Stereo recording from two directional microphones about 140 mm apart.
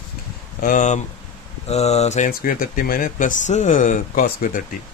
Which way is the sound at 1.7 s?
50° left (ahead or behind).